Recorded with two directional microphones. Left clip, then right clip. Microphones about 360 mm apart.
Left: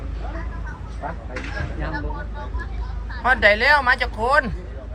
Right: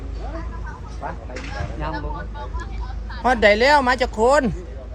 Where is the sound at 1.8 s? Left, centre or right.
Centre.